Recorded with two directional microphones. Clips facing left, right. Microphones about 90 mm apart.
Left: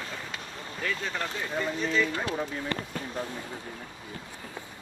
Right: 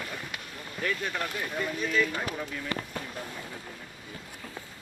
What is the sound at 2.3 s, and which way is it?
Speech, 25° left (ahead or behind).